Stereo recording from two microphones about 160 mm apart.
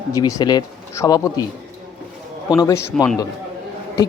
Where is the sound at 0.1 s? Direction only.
20° left (ahead or behind).